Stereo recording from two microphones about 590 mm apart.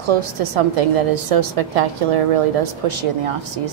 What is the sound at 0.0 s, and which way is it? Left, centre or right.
A woman's voice, right.